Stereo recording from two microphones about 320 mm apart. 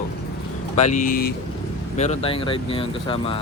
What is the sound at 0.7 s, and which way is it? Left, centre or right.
Speech, left.